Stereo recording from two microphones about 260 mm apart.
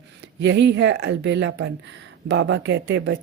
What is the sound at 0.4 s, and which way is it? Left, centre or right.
A woman's voice, right.